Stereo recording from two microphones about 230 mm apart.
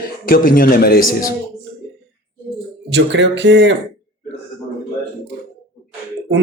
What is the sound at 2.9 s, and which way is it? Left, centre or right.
Speech, right.